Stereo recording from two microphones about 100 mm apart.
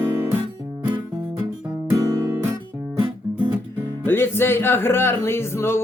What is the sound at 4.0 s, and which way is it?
Music, 20° left (ahead or behind).